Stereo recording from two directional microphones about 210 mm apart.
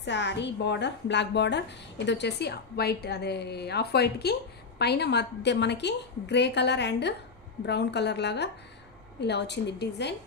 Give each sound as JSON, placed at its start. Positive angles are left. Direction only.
{"t": 0.0, "sound": "a woman's voice", "side_deg": 55}